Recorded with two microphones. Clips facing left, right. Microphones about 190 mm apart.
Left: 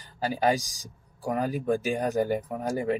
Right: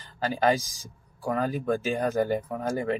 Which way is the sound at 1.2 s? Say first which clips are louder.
Even; 15° left (ahead or behind).